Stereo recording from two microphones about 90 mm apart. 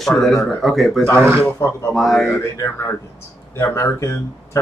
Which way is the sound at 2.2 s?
35° left (ahead or behind).